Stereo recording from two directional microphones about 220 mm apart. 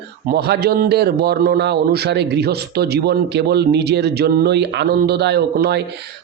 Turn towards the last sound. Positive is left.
turn(degrees=-50)  # may be behind; listen again after turning